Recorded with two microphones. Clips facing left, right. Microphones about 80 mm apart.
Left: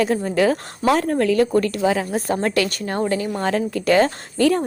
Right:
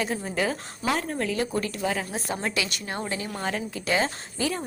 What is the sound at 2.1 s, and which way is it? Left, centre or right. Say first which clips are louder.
Speech: left 9 dB; left.